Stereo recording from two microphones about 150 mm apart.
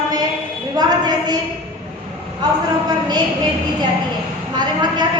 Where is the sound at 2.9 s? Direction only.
25° right (ahead or behind).